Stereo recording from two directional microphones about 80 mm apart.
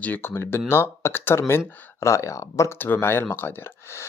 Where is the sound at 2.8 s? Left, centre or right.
Left.